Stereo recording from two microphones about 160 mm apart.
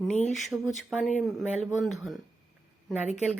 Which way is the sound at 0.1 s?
45° left (ahead or behind).